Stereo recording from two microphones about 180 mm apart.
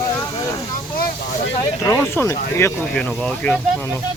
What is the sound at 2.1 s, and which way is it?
Speech, 15° left (ahead or behind).